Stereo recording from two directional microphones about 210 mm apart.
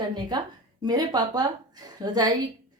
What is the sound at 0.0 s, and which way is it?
A woman's voice, 20° right (ahead or behind).